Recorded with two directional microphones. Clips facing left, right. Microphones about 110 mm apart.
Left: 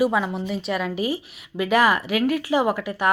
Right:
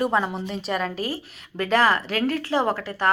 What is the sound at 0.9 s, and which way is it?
Speech, 15° left (ahead or behind).